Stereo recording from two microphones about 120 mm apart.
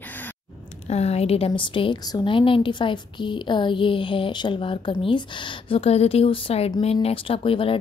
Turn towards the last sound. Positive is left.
turn(degrees=50)  # may be behind; listen again after turning